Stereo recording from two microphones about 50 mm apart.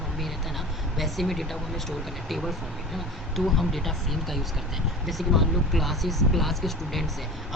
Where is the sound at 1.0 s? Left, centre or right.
Centre.